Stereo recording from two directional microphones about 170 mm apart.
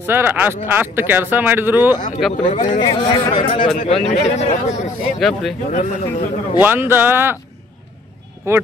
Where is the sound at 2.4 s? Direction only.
45° left (ahead or behind).